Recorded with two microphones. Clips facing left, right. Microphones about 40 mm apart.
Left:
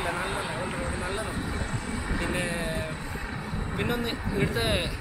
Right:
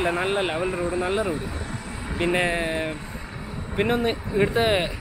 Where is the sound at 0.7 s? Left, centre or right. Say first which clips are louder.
Right 7 dB; centre.